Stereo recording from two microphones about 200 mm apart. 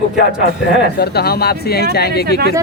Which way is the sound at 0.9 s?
55° left (ahead or behind).